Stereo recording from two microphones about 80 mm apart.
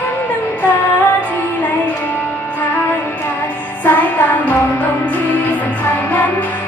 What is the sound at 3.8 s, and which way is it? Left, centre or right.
Music, left.